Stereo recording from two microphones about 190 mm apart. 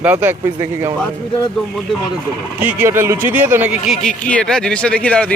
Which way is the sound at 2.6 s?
10° right (ahead or behind).